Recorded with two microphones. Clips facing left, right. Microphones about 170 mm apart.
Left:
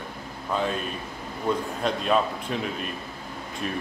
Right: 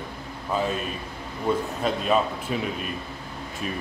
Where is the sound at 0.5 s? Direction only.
5° right (ahead or behind).